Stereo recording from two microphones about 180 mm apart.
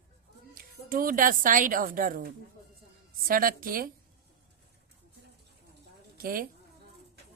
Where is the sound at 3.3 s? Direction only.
50° right (ahead or behind).